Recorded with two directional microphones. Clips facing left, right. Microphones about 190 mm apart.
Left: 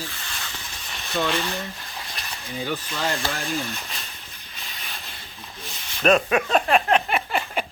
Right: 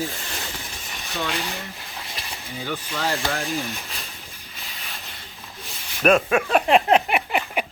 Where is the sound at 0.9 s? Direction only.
15° right (ahead or behind).